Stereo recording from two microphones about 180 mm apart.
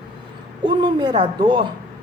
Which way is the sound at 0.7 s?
25° right (ahead or behind).